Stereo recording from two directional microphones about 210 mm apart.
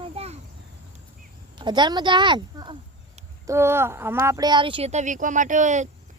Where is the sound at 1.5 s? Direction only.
20° right (ahead or behind).